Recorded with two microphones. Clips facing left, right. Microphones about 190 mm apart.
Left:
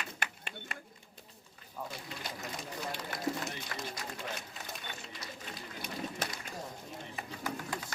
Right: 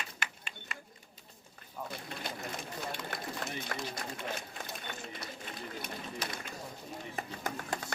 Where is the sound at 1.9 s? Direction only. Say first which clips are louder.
Right 2 dB; 55° right (ahead or behind).